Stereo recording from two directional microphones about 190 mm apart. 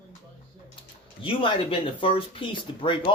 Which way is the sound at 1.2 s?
25° left (ahead or behind).